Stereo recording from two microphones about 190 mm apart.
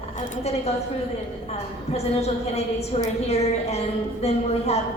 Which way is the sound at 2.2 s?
35° left (ahead or behind).